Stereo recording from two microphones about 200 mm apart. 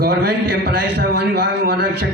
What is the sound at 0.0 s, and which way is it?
A man's voice, 50° right (ahead or behind).